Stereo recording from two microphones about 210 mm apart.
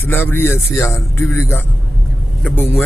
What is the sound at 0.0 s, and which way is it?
Speech, 10° left (ahead or behind).